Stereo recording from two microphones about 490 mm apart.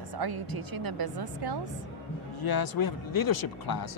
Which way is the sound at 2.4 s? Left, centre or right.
Left.